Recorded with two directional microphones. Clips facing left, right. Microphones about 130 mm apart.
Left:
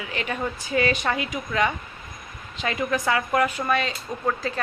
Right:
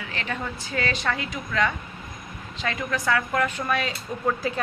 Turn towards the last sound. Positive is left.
turn(degrees=0)  # may be behind; listen again after turning